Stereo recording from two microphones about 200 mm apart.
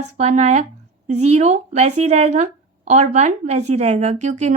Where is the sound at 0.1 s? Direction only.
35° right (ahead or behind).